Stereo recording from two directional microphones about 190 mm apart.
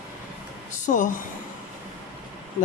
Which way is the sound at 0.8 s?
40° left (ahead or behind).